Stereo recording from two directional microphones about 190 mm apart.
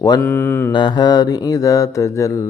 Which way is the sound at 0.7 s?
25° left (ahead or behind).